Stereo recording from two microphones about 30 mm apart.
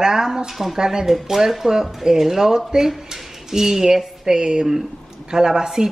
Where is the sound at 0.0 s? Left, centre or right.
Centre.